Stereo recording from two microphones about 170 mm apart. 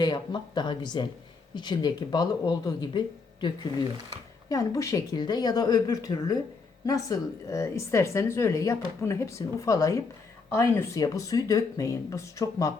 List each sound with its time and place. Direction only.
0.0 s speech: 25° left (ahead or behind)
4.4 s speech: 20° left (ahead or behind)